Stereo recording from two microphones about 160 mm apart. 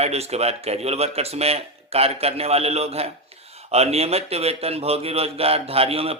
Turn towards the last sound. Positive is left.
turn(degrees=-35)  # may be behind; listen again after turning